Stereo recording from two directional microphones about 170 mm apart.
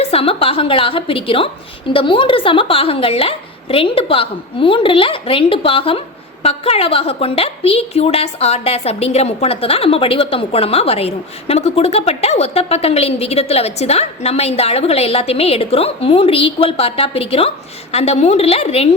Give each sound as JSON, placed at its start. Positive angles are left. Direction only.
{"t": 0.0, "sound": "a woman's voice", "side_deg": 35}